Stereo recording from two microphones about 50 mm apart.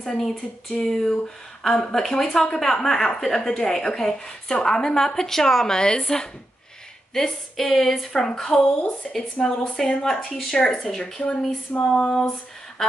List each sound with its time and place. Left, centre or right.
0.0 s a woman's voice: centre
11.9 s female singing: centre